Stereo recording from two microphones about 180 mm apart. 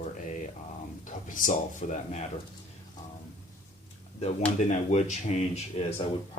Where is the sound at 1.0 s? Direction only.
45° left (ahead or behind).